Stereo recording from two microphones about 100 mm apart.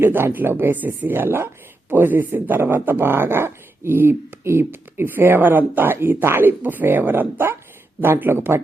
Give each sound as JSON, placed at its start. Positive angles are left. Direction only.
{"t": 0.0, "sound": "speech", "side_deg": -20}